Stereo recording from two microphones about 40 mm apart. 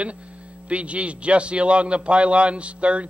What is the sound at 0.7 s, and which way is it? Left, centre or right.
A man's voice, right.